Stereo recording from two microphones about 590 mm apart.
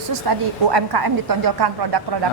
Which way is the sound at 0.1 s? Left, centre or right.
Right.